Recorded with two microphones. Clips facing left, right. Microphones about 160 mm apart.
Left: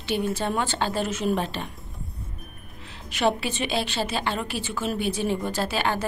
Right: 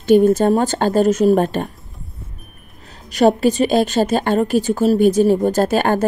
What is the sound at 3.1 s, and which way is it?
A woman's voice, 40° right (ahead or behind).